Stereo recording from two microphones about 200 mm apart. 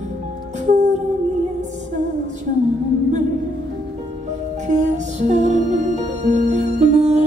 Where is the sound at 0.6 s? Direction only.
35° right (ahead or behind).